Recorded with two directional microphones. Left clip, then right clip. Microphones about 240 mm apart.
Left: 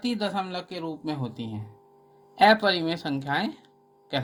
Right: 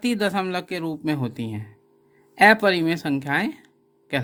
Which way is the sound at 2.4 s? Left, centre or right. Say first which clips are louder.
Right 4 dB; right.